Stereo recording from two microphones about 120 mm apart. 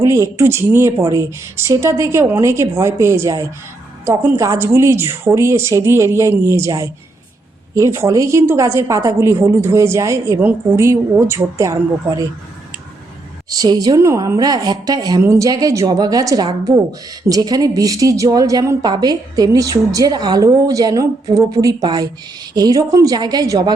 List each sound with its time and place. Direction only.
0.0 s a woman's voice: 25° right (ahead or behind)
13.5 s a woman's voice: 30° right (ahead or behind)